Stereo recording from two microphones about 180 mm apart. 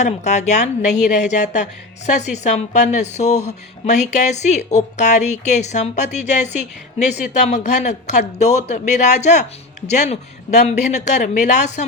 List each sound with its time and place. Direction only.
0.0 s speech: 40° left (ahead or behind)